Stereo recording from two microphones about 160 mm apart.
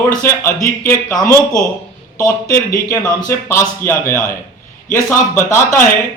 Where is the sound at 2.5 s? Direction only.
60° left (ahead or behind).